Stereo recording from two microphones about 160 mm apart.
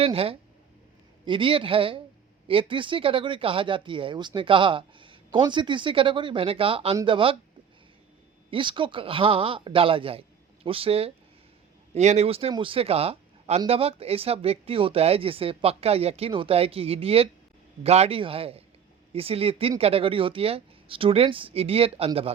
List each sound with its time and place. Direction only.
0.0 s speech: 35° right (ahead or behind)
8.4 s speech: 30° right (ahead or behind)